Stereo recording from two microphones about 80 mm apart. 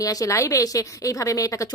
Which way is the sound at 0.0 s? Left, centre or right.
Left.